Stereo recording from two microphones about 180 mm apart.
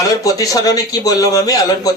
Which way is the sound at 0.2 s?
20° left (ahead or behind).